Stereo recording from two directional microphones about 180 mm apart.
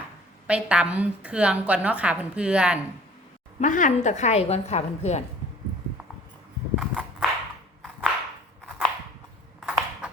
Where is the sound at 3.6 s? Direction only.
45° left (ahead or behind).